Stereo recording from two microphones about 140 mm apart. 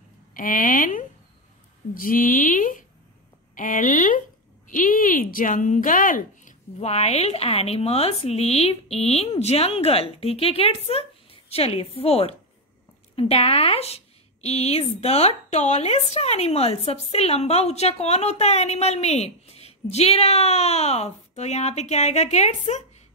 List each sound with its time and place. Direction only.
0.3 s speech: 75° left (ahead or behind)
2.0 s speech: 85° left
6.8 s a woman's voice: 50° left (ahead or behind)